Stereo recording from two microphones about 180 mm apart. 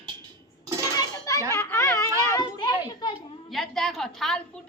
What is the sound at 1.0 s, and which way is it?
Children playing, 20° left (ahead or behind).